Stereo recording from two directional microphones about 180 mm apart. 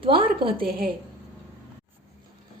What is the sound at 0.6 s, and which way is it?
Speech, 55° right (ahead or behind).